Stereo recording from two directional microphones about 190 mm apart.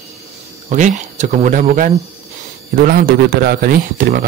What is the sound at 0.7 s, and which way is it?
Speech, 40° right (ahead or behind).